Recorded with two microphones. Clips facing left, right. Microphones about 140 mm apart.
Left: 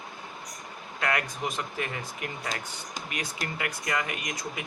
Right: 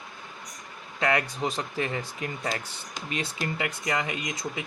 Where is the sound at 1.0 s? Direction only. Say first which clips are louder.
Right 4 dB; 30° right (ahead or behind).